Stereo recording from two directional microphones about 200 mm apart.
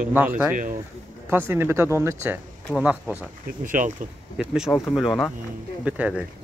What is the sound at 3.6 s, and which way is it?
Speech, 40° right (ahead or behind).